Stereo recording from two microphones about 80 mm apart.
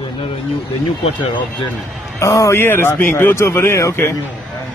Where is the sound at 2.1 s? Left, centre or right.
Left.